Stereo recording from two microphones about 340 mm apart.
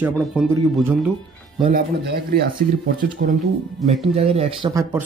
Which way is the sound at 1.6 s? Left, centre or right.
Right.